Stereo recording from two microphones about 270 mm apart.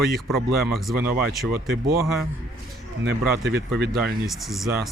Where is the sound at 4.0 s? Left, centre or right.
Centre.